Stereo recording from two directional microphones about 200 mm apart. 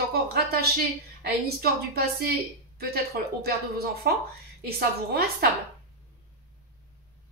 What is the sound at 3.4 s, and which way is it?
A woman's voice, 50° right (ahead or behind).